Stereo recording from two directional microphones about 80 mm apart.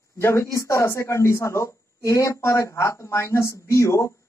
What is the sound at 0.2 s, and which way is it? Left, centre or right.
Speech, left.